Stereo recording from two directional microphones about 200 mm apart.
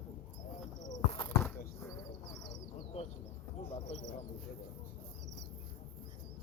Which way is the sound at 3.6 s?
30° left (ahead or behind).